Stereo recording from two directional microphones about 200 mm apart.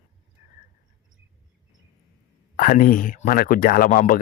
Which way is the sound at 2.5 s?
45° left (ahead or behind).